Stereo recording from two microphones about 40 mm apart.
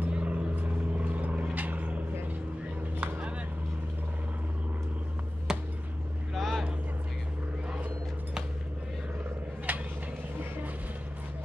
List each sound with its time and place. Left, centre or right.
0.1 s vehicle: right
5.5 s a sound: centre
6.3 s vehicle: centre
9.7 s vehicle: right